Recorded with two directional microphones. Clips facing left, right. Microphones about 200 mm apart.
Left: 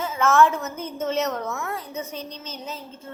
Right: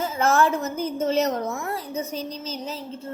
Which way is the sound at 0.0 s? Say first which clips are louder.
Left 1 dB; 35° right (ahead or behind).